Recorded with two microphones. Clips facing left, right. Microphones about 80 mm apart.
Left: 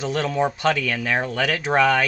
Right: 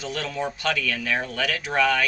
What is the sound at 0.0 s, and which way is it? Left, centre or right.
Speech, left.